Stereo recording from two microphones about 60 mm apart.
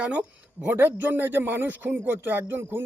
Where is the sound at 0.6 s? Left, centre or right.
Right.